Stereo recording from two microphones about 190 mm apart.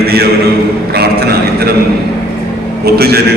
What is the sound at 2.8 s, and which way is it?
Speech, 55° right (ahead or behind).